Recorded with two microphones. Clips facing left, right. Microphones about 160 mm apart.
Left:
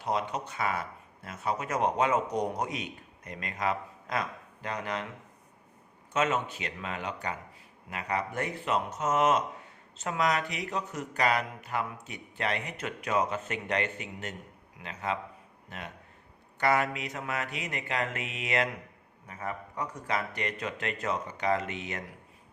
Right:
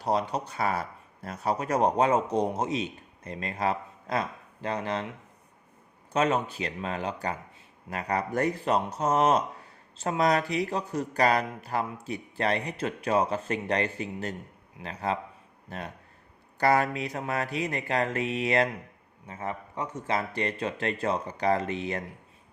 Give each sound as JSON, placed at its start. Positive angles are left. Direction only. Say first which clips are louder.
{"t": 0.0, "sound": "speech", "louder": "right 4 dB", "side_deg": -35}
{"t": 6.1, "sound": "speech", "louder": "right 3 dB", "side_deg": -35}
{"t": 19.3, "sound": "speech", "louder": "right 2 dB", "side_deg": -25}